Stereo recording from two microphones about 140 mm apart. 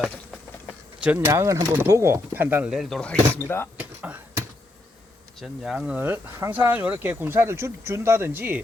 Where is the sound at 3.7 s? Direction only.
10° right (ahead or behind).